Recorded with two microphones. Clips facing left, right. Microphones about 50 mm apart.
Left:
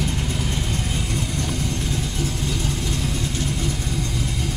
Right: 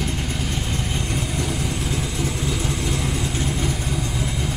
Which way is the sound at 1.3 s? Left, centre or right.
Right.